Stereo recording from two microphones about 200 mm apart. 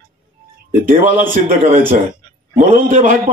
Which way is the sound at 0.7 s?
40° right (ahead or behind).